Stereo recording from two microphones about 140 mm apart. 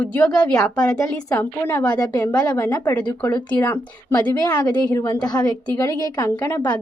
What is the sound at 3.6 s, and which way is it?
A woman's voice, 25° left (ahead or behind).